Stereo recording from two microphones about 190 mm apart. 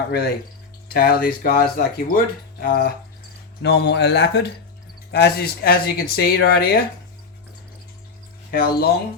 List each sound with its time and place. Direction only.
0.9 s speech: 50° left (ahead or behind)
3.6 s speech: 60° left (ahead or behind)
8.4 s speech: 55° left (ahead or behind)